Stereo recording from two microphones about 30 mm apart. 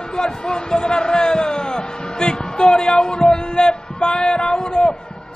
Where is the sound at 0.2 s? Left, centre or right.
Left.